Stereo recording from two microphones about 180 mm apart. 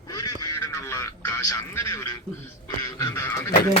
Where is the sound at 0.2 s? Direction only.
20° left (ahead or behind).